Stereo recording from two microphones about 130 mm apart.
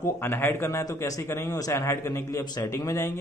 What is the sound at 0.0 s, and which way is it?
Speech, 20° left (ahead or behind).